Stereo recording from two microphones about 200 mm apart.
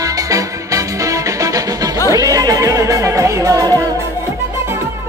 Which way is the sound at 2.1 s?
15° right (ahead or behind).